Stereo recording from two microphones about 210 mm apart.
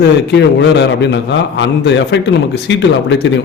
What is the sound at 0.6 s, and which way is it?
A man's voice, 55° left (ahead or behind).